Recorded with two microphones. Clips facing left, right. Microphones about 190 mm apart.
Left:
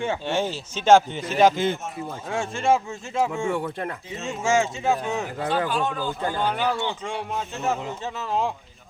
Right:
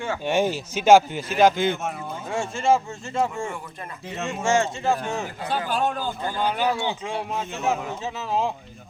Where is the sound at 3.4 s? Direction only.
70° left (ahead or behind).